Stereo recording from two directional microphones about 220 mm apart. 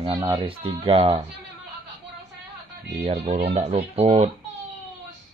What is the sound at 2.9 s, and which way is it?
Speech, 30° right (ahead or behind).